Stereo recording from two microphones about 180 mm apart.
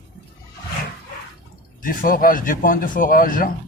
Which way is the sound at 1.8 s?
50° left (ahead or behind).